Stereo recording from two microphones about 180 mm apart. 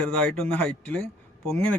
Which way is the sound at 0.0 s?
5° left (ahead or behind).